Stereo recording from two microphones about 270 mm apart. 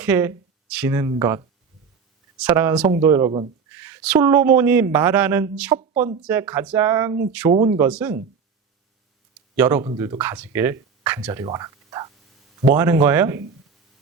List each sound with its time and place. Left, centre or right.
0.0 s speech: centre
5.9 s speech: right
6.2 s speech: centre
9.6 s speech: centre